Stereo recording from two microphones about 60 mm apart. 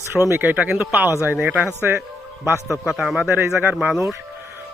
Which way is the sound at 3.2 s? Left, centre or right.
Right.